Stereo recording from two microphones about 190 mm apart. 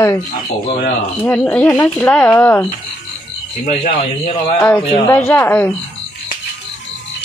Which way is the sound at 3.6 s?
40° left (ahead or behind).